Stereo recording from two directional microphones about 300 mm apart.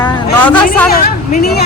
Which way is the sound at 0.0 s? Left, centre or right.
Centre.